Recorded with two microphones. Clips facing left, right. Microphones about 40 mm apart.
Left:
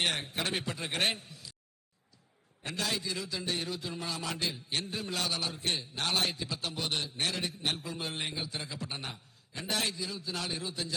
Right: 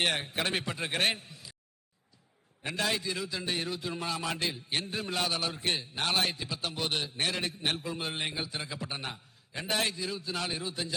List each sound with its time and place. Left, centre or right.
0.0 s a man's voice: centre
2.6 s a man's voice: centre
3.7 s a man's voice: centre